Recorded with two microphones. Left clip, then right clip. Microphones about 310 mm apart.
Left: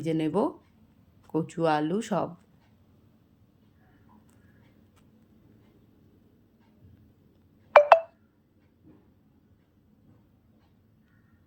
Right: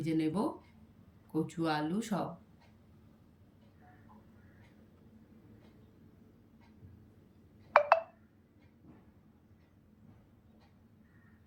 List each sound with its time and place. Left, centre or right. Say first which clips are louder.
0.0 s speech: left 6 dB; centre
7.7 s telephone dialing: left 9 dB; left